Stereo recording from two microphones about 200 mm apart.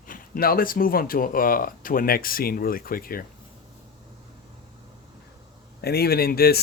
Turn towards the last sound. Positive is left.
turn(degrees=50)  # may be behind; listen again after turning